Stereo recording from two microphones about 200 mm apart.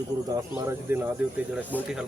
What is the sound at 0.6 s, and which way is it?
Speech, 10° right (ahead or behind).